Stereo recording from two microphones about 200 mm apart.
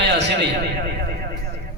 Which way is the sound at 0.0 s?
60° right (ahead or behind).